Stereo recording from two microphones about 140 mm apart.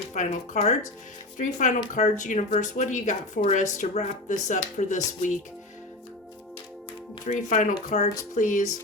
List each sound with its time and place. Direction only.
0.1 s speech: 60° left (ahead or behind)
7.3 s speech: 65° left (ahead or behind)